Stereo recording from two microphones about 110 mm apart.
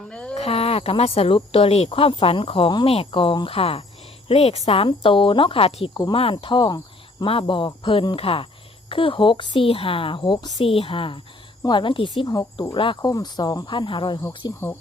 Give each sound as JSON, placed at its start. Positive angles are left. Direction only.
{"t": 0.1, "sound": "a sound", "side_deg": 10}
{"t": 0.3, "sound": "speech", "side_deg": 70}
{"t": 4.9, "sound": "speech", "side_deg": 50}
{"t": 6.3, "sound": "speech", "side_deg": 45}
{"t": 7.3, "sound": "speech", "side_deg": 55}
{"t": 12.2, "sound": "speech", "side_deg": 35}
{"t": 12.7, "sound": "speech", "side_deg": 50}
{"t": 13.0, "sound": "speech", "side_deg": 35}